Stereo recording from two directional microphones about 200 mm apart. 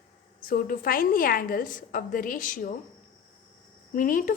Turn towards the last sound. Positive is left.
turn(degrees=40)  # may be behind; listen again after turning